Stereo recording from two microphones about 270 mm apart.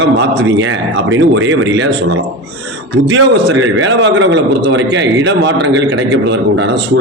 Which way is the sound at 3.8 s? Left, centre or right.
Right.